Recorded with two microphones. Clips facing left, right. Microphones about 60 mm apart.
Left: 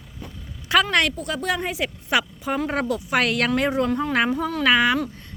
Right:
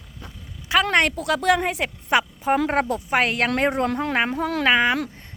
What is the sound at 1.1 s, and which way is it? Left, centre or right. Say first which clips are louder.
Speech: right 6 dB; right.